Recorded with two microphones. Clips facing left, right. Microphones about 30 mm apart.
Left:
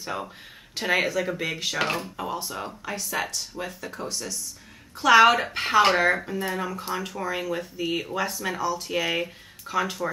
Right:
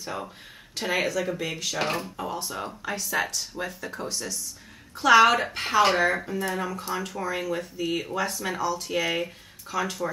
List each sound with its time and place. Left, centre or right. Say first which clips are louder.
0.0 s speech: left 2 dB; centre